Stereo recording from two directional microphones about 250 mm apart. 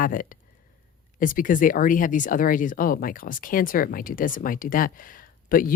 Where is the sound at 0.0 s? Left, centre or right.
Left.